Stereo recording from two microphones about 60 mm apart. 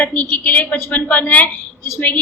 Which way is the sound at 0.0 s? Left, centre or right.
Left.